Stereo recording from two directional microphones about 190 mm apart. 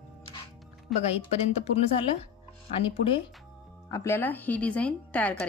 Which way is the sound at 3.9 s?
10° left (ahead or behind).